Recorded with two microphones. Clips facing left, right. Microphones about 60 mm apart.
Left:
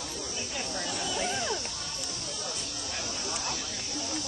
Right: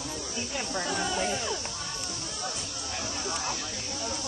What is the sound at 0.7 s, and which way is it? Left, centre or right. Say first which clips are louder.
Snake: right 5 dB; right.